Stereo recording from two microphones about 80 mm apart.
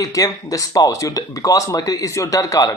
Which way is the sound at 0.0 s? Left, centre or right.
Left.